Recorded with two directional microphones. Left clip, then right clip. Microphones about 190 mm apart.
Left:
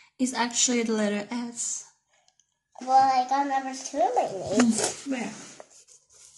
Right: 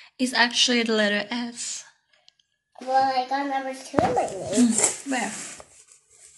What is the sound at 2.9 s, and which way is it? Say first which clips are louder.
A child's voice: left 2 dB; 5° left (ahead or behind).